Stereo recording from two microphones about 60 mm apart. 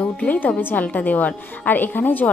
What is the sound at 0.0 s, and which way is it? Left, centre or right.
A woman's voice, left.